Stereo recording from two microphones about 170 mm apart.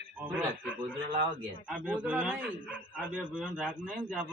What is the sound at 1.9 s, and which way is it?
A man's voice, 5° right (ahead or behind).